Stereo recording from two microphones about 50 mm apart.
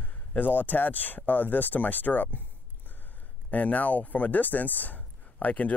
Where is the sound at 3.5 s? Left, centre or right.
Left.